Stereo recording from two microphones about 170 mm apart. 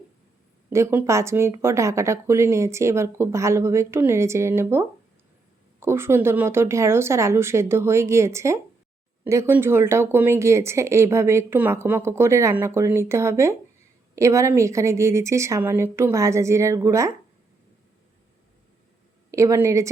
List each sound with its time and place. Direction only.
0.7 s speech: 15° right (ahead or behind)
19.3 s speech: 20° right (ahead or behind)